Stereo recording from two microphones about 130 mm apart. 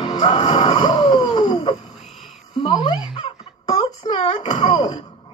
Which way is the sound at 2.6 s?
40° left (ahead or behind).